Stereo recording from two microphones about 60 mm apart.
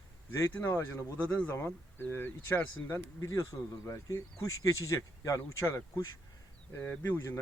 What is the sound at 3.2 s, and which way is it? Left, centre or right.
Speech, left.